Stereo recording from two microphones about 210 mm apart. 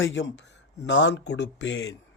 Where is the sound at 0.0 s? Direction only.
60° left (ahead or behind).